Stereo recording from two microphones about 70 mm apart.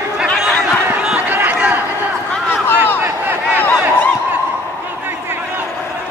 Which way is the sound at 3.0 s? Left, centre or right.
Right.